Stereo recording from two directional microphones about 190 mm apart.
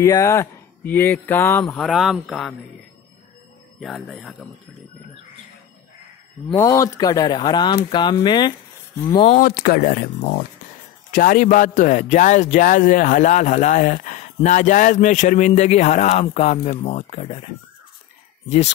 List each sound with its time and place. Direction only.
0.0 s speech: 15° left (ahead or behind)
1.7 s a man's voice: centre (ahead or behind)
3.8 s a man's voice: centre (ahead or behind)
6.5 s speech: 15° left (ahead or behind)
9.2 s a man's voice: 45° left (ahead or behind)